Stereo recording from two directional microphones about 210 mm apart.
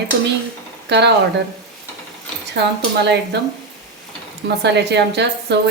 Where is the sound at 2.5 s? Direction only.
55° right (ahead or behind).